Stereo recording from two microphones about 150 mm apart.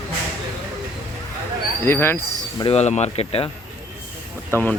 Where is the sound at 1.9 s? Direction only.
15° left (ahead or behind).